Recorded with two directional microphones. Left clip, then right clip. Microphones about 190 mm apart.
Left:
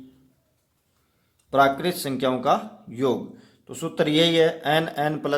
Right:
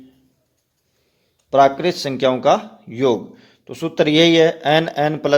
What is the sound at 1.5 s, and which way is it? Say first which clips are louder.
Speech: right 6 dB; 25° right (ahead or behind).